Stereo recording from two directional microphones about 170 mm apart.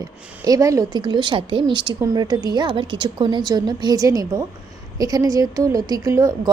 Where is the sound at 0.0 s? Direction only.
20° right (ahead or behind).